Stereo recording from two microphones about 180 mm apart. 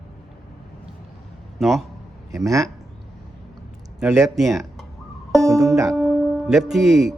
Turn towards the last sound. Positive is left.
turn(degrees=0)  # may be behind; listen again after turning